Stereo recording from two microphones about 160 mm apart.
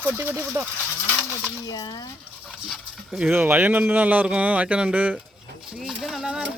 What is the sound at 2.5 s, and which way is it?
Speech, centre (ahead or behind).